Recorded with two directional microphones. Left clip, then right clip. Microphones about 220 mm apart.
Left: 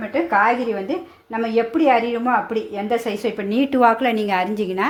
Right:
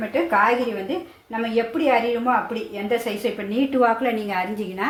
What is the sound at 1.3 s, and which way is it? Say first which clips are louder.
Speech: left 3 dB; 40° left (ahead or behind).